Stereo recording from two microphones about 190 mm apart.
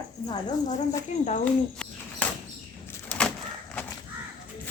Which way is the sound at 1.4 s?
5° left (ahead or behind).